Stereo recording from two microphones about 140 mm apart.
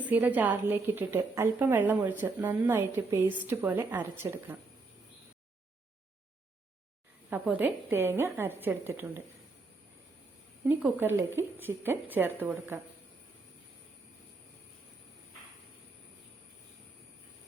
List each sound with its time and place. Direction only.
0.0 s a woman's voice: 10° right (ahead or behind)
7.3 s a woman's voice: 10° right (ahead or behind)
10.7 s a woman's voice: 10° right (ahead or behind)